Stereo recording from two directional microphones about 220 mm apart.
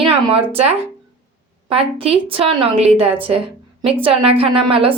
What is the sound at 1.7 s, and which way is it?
A woman's voice, 25° right (ahead or behind).